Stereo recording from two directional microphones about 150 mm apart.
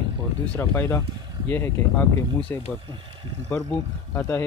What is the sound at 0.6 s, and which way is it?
Speech, 15° left (ahead or behind).